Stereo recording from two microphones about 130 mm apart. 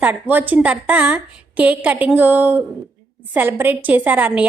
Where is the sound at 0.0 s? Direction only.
15° right (ahead or behind).